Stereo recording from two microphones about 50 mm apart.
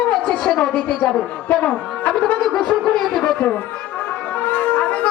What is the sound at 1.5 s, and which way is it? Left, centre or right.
Speech, left.